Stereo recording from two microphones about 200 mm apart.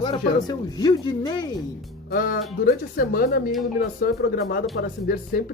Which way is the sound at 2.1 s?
45° left (ahead or behind).